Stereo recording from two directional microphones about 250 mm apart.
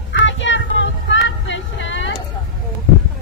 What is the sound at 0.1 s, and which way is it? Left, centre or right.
Child singing, left.